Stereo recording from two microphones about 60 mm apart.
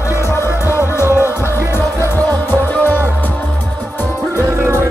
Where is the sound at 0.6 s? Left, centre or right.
Left.